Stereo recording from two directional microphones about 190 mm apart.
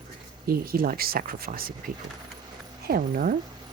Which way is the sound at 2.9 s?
50° right (ahead or behind).